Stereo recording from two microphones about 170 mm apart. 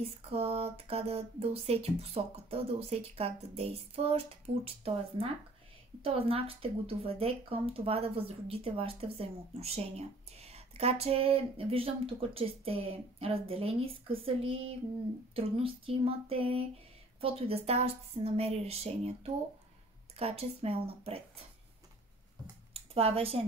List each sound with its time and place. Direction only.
0.3 s speech: 35° right (ahead or behind)
22.8 s speech: 35° right (ahead or behind)